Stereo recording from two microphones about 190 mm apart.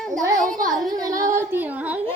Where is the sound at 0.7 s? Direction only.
20° right (ahead or behind).